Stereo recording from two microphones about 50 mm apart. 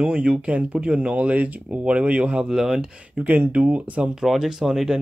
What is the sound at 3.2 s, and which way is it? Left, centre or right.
Speech, right.